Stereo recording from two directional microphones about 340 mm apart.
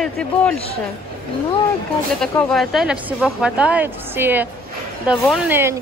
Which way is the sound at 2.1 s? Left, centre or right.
Centre.